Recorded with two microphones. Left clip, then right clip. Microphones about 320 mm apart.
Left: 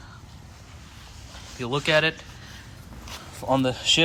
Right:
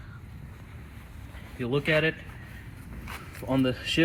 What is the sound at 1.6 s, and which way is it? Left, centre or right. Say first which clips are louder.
Speech: left 4 dB; centre.